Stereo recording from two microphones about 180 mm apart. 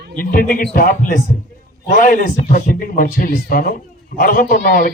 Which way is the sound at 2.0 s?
50° left (ahead or behind).